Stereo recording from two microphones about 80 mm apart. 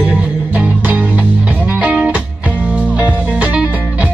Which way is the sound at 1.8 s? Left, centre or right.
Centre.